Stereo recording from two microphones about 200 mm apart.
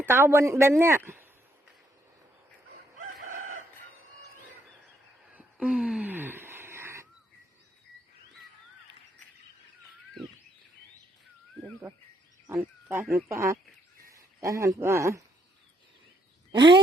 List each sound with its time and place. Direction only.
0.0 s speech: 10° right (ahead or behind)
3.2 s chicken: 40° right (ahead or behind)
5.3 s cat: 5° right (ahead or behind)
12.5 s speech: 10° right (ahead or behind)
16.5 s speech: 25° right (ahead or behind)